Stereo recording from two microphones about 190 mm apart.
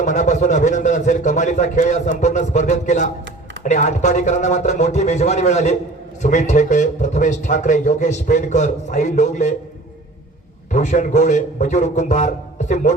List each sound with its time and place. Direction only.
0.0 s a man's voice: 40° left (ahead or behind)
10.7 s a man's voice: 40° left (ahead or behind)